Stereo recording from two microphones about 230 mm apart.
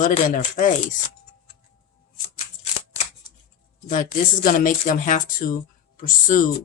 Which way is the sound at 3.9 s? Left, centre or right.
Left.